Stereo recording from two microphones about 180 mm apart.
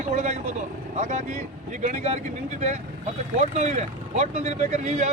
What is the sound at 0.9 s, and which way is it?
Speech, 40° right (ahead or behind).